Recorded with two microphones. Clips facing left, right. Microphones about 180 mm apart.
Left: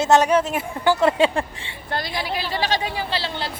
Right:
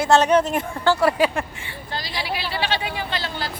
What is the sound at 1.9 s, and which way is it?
Speech, 55° left (ahead or behind).